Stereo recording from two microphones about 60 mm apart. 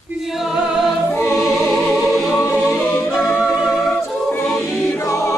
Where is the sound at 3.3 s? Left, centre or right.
Centre.